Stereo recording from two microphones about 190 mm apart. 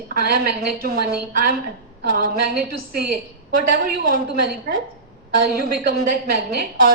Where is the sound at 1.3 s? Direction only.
50° right (ahead or behind).